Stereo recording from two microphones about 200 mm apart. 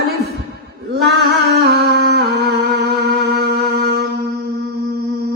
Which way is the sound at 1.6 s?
55° right (ahead or behind).